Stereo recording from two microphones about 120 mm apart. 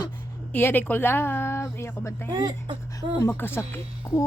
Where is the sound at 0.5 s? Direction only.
15° left (ahead or behind).